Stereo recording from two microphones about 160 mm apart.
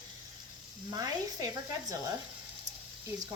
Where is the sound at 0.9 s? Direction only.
25° right (ahead or behind).